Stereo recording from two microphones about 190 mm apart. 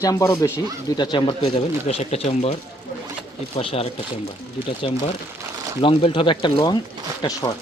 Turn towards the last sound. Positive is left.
turn(degrees=20)  # may be behind; listen again after turning